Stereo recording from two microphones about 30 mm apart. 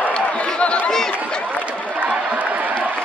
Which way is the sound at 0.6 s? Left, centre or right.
Left.